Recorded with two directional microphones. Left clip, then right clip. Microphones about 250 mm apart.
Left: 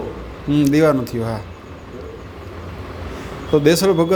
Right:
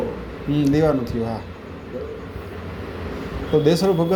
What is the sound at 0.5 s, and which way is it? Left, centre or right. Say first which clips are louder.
Speech: left 4 dB; left.